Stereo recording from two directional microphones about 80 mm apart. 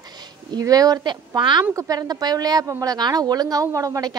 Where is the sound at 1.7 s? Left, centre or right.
Right.